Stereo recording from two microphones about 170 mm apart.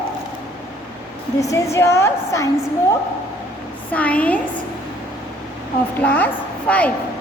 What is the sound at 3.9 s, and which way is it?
Speech, 10° left (ahead or behind).